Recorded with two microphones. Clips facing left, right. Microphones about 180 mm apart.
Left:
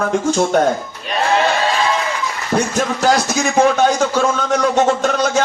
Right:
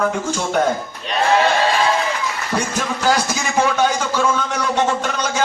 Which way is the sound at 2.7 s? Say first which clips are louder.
Left 2 dB; 45° left (ahead or behind).